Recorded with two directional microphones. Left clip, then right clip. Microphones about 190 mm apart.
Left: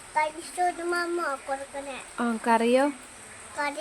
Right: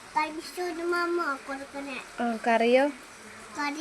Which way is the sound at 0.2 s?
15° left (ahead or behind).